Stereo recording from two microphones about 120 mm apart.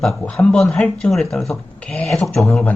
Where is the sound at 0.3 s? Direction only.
5° left (ahead or behind).